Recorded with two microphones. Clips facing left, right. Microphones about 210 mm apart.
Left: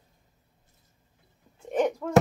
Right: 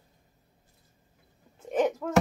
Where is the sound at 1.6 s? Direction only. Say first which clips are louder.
Even; 5° right (ahead or behind).